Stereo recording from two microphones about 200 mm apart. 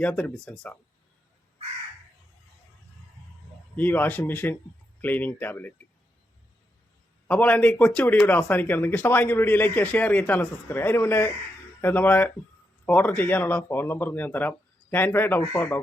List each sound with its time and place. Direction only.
0.0 s speech: 5° left (ahead or behind)
3.8 s speech: 10° left (ahead or behind)
7.3 s speech: 5° left (ahead or behind)